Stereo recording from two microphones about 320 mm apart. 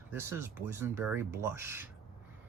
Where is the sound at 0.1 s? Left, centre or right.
Centre.